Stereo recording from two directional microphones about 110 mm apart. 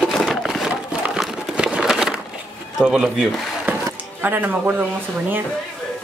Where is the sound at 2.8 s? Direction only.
5° right (ahead or behind).